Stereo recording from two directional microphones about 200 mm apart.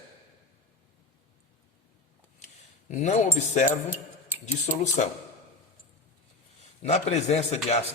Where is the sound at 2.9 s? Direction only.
35° left (ahead or behind).